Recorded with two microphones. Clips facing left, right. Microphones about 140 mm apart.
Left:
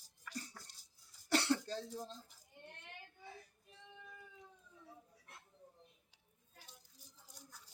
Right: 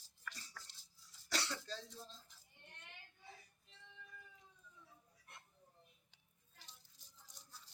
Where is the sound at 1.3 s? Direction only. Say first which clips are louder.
Left 9 dB; 60° left (ahead or behind).